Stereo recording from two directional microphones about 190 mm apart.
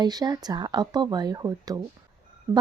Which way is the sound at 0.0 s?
20° right (ahead or behind).